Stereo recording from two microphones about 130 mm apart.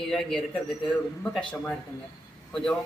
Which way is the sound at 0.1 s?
5° left (ahead or behind).